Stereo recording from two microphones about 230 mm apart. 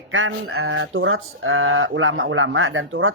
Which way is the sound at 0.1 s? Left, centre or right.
Right.